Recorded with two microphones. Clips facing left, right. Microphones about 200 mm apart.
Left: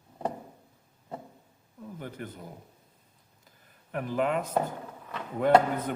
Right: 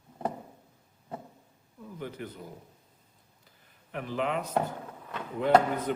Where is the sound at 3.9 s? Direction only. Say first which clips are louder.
Left 3 dB; 45° left (ahead or behind).